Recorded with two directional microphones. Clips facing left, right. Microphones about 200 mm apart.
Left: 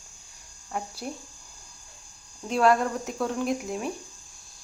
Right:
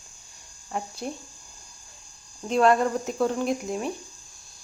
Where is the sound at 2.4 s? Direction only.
5° left (ahead or behind).